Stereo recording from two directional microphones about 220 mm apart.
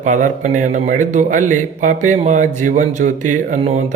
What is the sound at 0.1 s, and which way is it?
A man's voice, 35° right (ahead or behind).